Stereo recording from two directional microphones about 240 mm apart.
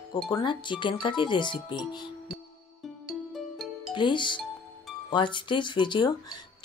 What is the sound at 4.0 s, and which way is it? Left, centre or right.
Speech, centre.